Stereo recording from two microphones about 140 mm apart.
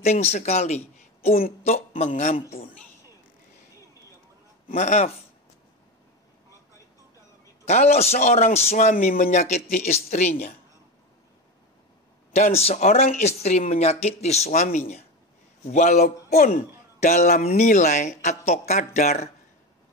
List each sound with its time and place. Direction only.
0.0 s speech: 50° left (ahead or behind)
4.7 s a man's voice: 55° left (ahead or behind)
7.6 s a man's voice: 50° left (ahead or behind)
12.4 s a man's voice: 50° left (ahead or behind)
16.3 s a man's voice: 70° left (ahead or behind); by 19.2 s 55° left (ahead or behind)